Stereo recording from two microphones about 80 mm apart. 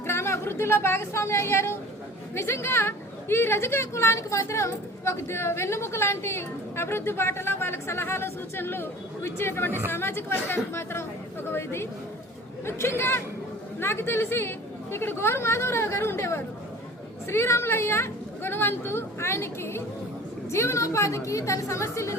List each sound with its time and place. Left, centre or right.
0.1 s a woman's voice: left